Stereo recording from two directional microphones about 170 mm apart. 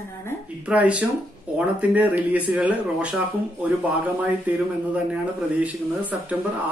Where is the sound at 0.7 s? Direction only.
10° right (ahead or behind).